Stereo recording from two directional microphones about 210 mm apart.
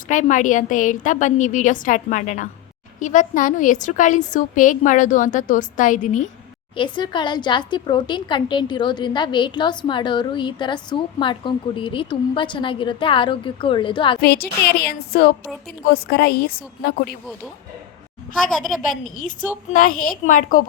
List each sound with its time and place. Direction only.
0.1 s a woman's voice: 35° left (ahead or behind)
6.7 s a woman's voice: 20° left (ahead or behind)
14.2 s a woman's voice: 45° left (ahead or behind)
18.5 s a woman's voice: centre (ahead or behind)
19.7 s a woman's voice: 40° left (ahead or behind)